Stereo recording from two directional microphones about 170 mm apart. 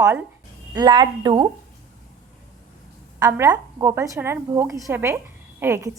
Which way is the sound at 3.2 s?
20° right (ahead or behind).